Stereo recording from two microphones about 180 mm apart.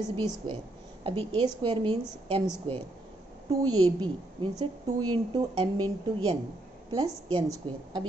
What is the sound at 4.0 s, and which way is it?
A woman's voice, 30° right (ahead or behind).